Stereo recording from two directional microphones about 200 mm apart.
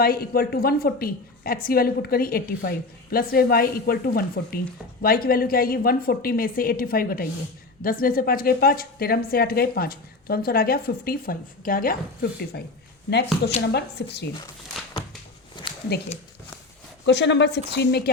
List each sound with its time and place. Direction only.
0.0 s a woman's voice: 50° left (ahead or behind)
15.6 s a sound: 20° left (ahead or behind)
17.1 s a woman's voice: 60° left (ahead or behind)